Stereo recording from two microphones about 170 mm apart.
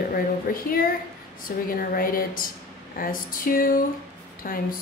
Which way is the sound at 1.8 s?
55° left (ahead or behind).